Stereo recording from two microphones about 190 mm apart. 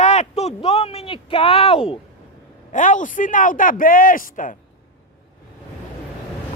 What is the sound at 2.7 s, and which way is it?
A man's voice, 40° left (ahead or behind).